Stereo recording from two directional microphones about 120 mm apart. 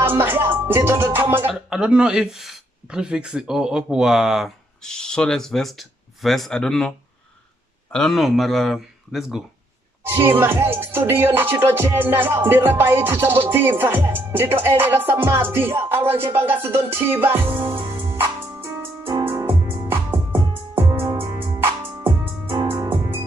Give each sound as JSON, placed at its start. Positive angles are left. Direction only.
{"t": 0.0, "sound": "music", "side_deg": -15}
{"t": 1.5, "sound": "speech", "side_deg": -5}
{"t": 7.9, "sound": "speech", "side_deg": 0}
{"t": 10.0, "sound": "music", "side_deg": -20}